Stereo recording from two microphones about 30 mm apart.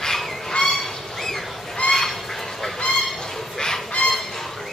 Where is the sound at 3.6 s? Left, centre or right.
Left.